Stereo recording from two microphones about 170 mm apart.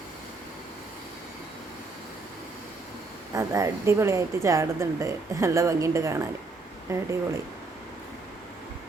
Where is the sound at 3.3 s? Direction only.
20° right (ahead or behind).